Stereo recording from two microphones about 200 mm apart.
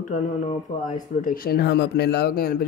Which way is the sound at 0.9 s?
45° left (ahead or behind).